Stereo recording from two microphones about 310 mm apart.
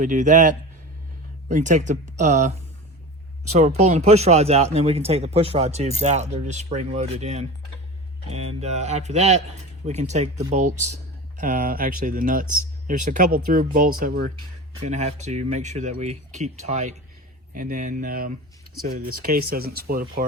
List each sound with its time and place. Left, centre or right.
0.0 s speech: right
3.8 s speech: right